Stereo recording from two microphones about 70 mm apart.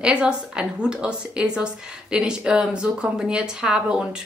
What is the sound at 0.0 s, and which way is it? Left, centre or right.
A woman's voice, centre.